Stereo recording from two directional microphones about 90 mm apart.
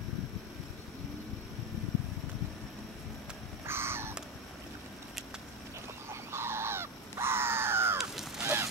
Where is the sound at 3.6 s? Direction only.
25° right (ahead or behind).